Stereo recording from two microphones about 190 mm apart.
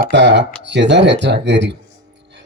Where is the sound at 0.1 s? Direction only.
65° right (ahead or behind).